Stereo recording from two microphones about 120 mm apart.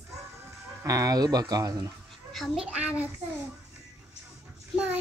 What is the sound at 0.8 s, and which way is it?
Speech, 30° right (ahead or behind).